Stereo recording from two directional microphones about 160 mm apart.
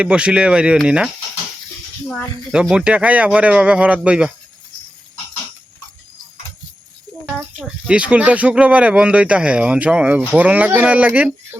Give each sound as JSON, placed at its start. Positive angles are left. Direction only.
{"t": 0.0, "sound": "speech", "side_deg": -5}
{"t": 2.5, "sound": "speech", "side_deg": -5}
{"t": 7.9, "sound": "speech", "side_deg": -5}